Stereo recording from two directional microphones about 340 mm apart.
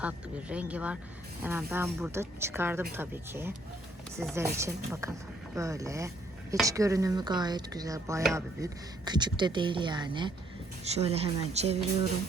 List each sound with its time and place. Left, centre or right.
0.0 s speech: centre